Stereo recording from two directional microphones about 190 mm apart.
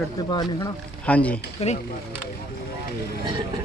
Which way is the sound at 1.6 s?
35° left (ahead or behind).